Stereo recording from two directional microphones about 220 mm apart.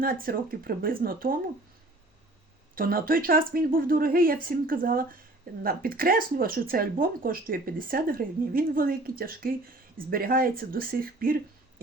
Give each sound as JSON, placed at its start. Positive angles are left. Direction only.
{"t": 0.0, "sound": "speech", "side_deg": -40}
{"t": 2.7, "sound": "speech", "side_deg": -40}